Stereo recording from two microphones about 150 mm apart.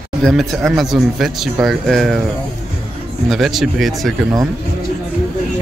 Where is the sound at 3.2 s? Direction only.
Centre (ahead or behind).